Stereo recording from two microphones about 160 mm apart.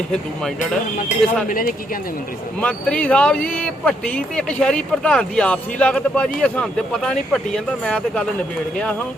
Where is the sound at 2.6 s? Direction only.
5° left (ahead or behind).